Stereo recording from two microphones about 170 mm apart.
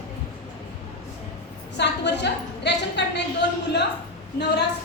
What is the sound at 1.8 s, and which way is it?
Speech, 90° left.